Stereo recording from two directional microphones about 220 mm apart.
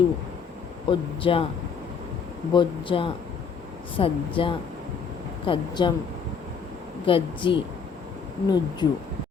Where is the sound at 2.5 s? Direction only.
20° left (ahead or behind).